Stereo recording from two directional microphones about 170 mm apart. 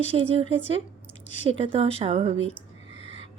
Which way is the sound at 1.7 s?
35° right (ahead or behind).